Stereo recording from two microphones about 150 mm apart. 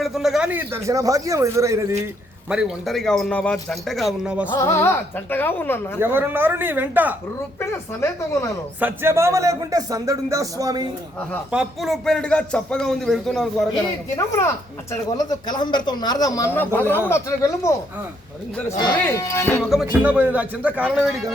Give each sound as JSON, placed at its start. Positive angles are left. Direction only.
{"t": 0.0, "sound": "speech", "side_deg": 0}
{"t": 2.5, "sound": "speech", "side_deg": -5}
{"t": 4.6, "sound": "speech", "side_deg": 15}
{"t": 6.0, "sound": "speech", "side_deg": -15}
{"t": 7.6, "sound": "a man's voice", "side_deg": 20}
{"t": 8.8, "sound": "speech", "side_deg": -15}
{"t": 11.5, "sound": "speech", "side_deg": 0}
{"t": 15.2, "sound": "a man's voice", "side_deg": 30}
{"t": 19.0, "sound": "speech", "side_deg": 20}
{"t": 19.7, "sound": "speech", "side_deg": -5}